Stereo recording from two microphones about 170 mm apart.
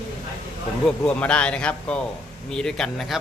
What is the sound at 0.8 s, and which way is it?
Speech, 5° left (ahead or behind).